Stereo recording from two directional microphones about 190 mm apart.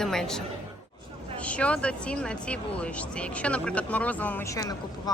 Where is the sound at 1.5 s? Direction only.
5° left (ahead or behind).